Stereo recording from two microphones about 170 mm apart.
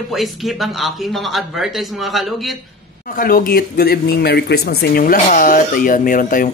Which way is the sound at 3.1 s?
55° left (ahead or behind).